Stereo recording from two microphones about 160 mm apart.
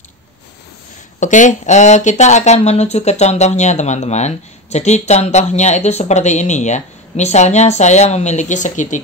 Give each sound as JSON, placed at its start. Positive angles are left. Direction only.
{"t": 1.2, "sound": "speech", "side_deg": 50}